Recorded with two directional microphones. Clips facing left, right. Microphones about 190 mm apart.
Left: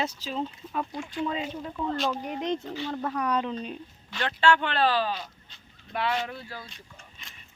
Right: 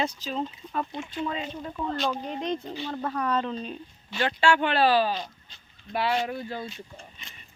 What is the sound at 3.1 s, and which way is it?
Speech, 15° left (ahead or behind).